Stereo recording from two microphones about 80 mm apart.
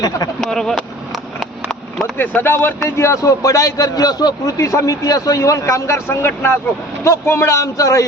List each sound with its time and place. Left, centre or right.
0.4 s speech: centre
2.1 s speech: left
2.8 s a man's voice: left
4.4 s speech: left